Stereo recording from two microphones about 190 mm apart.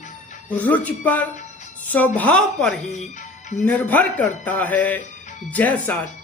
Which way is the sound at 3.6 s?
10° left (ahead or behind).